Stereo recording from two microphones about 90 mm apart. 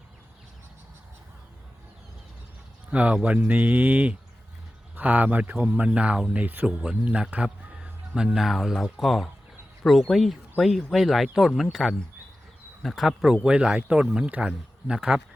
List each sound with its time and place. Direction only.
2.9 s speech: 15° right (ahead or behind)